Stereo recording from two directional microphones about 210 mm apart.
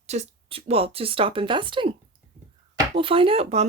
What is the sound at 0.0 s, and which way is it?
Speech, 30° right (ahead or behind).